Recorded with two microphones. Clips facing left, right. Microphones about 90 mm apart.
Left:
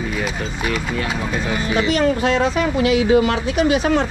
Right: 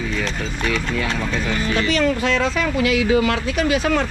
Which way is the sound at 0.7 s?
10° left (ahead or behind).